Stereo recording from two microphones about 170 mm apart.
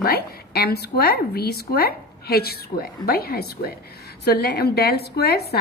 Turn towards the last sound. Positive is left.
turn(degrees=70)  # may be behind; listen again after turning